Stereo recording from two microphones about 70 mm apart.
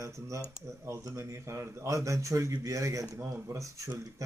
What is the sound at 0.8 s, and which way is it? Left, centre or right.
Speech, right.